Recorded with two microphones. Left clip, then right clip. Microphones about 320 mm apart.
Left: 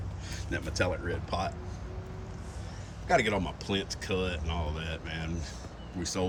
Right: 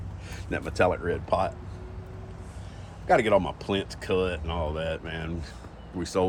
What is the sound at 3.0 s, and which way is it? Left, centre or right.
Speech, centre.